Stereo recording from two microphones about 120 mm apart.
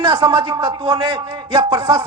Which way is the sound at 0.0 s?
40° right (ahead or behind).